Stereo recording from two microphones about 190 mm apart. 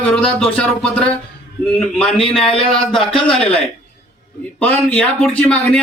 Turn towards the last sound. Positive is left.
turn(degrees=5)  # may be behind; listen again after turning